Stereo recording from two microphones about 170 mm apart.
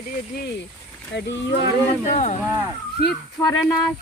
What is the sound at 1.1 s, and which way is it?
Speech, 90° left.